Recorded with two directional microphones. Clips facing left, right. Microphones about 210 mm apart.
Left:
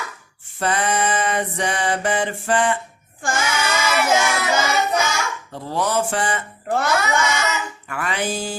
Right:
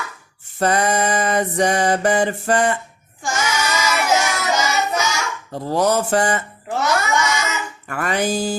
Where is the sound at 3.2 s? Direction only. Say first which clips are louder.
Even; 55° left (ahead or behind).